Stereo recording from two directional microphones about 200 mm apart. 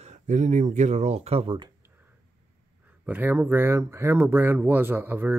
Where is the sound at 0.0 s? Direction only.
35° right (ahead or behind).